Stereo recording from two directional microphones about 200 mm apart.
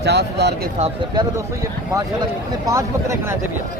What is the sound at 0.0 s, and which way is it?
Speech, 55° right (ahead or behind).